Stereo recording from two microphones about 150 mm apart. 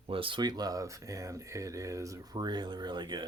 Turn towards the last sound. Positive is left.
turn(degrees=-30)  # may be behind; listen again after turning